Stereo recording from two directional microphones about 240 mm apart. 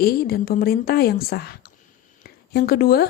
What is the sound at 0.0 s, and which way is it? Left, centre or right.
Speech, left.